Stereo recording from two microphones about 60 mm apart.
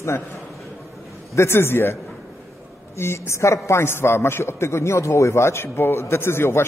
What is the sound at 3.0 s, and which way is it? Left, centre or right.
A man's voice, left.